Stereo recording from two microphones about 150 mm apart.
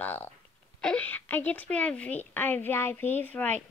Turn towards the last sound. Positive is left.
turn(degrees=10)  # may be behind; listen again after turning